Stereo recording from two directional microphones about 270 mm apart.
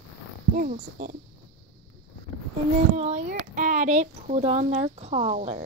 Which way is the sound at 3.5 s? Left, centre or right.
Right.